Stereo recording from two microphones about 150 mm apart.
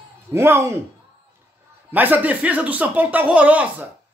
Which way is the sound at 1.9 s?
10° right (ahead or behind).